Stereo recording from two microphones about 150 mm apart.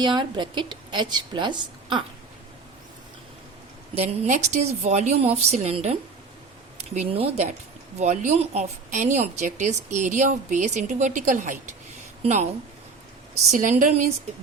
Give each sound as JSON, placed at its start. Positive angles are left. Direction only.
{"t": 0.0, "sound": "a woman's voice", "side_deg": -30}
{"t": 3.9, "sound": "a woman's voice", "side_deg": -45}
{"t": 13.5, "sound": "speech", "side_deg": -60}